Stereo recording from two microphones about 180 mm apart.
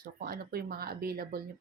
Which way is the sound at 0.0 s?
60° right (ahead or behind).